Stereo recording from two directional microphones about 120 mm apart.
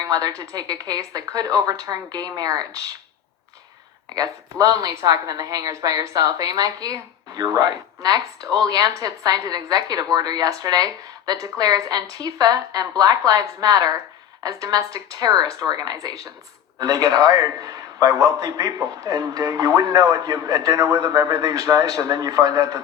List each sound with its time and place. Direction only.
0.0 s a woman's voice: 30° right (ahead or behind)
4.1 s a man's voice: 30° right (ahead or behind)